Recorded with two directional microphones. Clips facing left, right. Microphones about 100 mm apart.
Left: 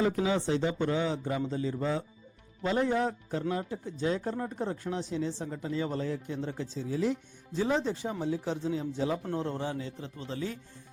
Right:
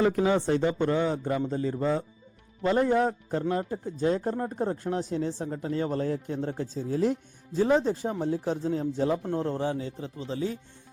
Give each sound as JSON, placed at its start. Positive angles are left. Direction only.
{"t": 0.0, "sound": "speech", "side_deg": -55}
{"t": 9.1, "sound": "a man's voice", "side_deg": -10}
{"t": 9.4, "sound": "a man's voice", "side_deg": -35}